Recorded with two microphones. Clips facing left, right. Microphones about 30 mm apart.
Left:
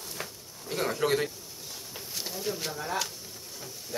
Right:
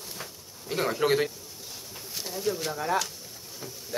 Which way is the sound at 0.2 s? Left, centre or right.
Centre.